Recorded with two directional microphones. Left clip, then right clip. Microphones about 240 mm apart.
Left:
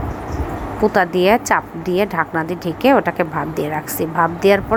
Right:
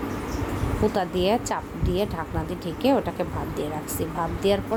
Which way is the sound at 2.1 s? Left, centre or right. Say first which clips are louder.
Left 11 dB; left.